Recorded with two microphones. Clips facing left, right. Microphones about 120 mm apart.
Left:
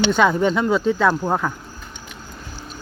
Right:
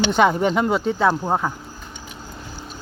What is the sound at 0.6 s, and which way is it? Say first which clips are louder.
Speech: left 1 dB; 25° right (ahead or behind).